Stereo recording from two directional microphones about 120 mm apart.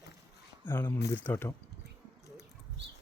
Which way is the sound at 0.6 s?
15° left (ahead or behind).